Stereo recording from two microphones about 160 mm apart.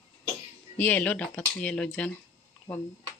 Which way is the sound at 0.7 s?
10° left (ahead or behind).